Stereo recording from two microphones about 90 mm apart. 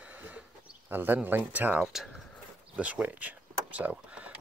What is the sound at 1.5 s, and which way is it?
Speech, 20° right (ahead or behind).